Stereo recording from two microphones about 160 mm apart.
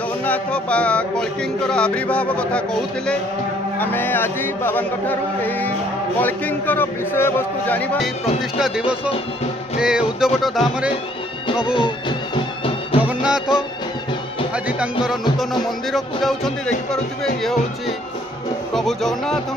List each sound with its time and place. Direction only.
0.2 s chant: 10° left (ahead or behind)
8.5 s music: 5° right (ahead or behind)
11.6 s music: 30° left (ahead or behind)
13.0 s music: 5° right (ahead or behind)
15.9 s music: centre (ahead or behind)
18.7 s music: centre (ahead or behind)